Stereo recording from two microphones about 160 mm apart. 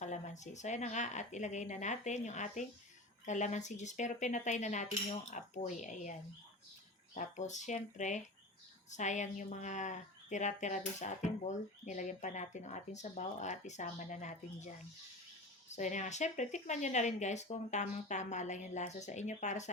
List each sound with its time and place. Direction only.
0.0 s a woman's voice: 45° left (ahead or behind)
15.7 s a woman's voice: 50° left (ahead or behind)